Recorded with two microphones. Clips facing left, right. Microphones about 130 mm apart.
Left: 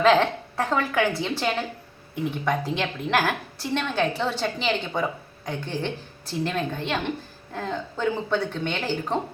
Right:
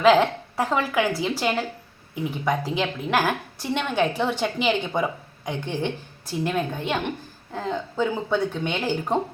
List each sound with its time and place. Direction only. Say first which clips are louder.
0.0 s a woman's voice: right 2 dB; 10° right (ahead or behind)